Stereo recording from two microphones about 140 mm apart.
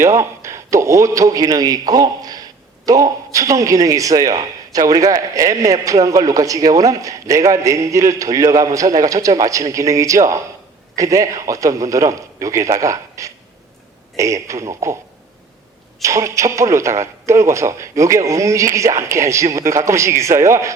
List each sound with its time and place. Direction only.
0.0 s a man's voice: 20° right (ahead or behind)
16.0 s a man's voice: 20° right (ahead or behind)